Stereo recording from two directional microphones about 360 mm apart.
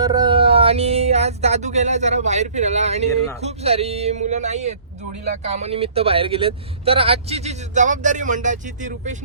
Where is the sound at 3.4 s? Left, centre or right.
Centre.